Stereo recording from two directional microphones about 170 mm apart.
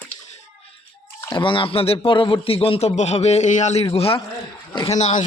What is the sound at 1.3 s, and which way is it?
Speech, 30° left (ahead or behind).